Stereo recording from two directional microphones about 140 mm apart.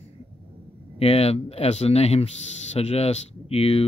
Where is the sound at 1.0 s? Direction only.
45° left (ahead or behind).